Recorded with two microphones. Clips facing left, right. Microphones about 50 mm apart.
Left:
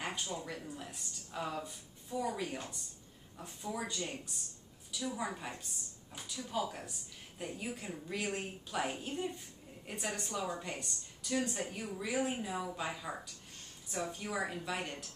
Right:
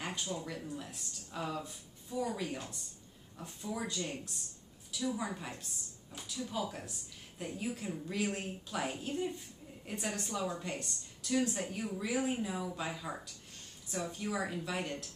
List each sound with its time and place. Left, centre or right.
0.0 s a woman's voice: centre